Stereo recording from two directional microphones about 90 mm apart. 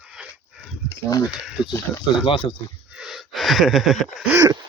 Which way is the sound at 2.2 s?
70° left (ahead or behind).